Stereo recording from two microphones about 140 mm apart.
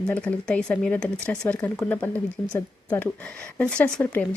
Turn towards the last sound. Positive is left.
turn(degrees=10)  # may be behind; listen again after turning